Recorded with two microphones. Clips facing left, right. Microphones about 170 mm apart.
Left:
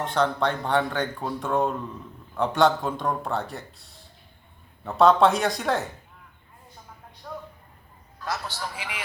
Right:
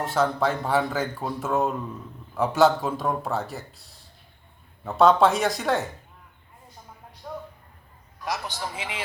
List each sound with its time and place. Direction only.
0.0 s speech: 5° right (ahead or behind)
7.3 s a sound: 10° right (ahead or behind)
8.2 s a man's voice: 15° right (ahead or behind)